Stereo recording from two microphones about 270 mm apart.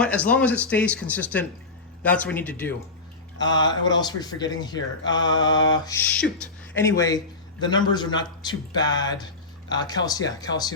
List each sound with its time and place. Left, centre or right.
0.0 s a man's voice: centre
6.1 s a man's voice: centre